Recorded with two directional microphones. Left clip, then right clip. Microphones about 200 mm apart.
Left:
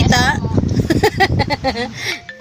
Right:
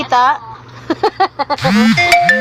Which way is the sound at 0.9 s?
45° left (ahead or behind).